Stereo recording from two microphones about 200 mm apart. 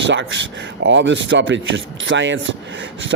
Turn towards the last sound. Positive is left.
turn(degrees=-70)  # may be behind; listen again after turning